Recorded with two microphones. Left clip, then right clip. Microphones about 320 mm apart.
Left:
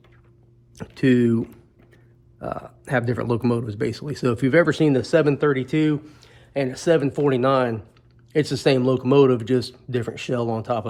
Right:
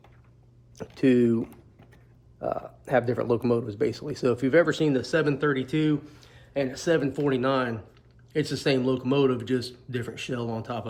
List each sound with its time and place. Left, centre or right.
0.8 s speech: left